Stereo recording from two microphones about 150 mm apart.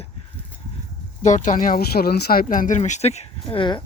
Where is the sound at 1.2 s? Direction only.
55° left (ahead or behind); by 2.4 s 90° left.